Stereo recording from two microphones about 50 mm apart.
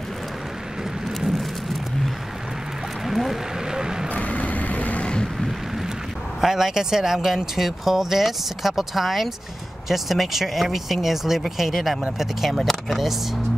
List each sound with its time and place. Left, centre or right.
1.2 s vehicle: centre
4.1 s vehicle: left
6.4 s speech: centre